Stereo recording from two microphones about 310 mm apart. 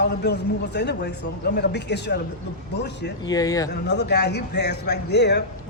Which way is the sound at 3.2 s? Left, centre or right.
Centre.